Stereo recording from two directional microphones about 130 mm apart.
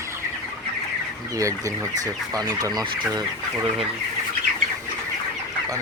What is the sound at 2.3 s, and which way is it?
Speech, 25° right (ahead or behind).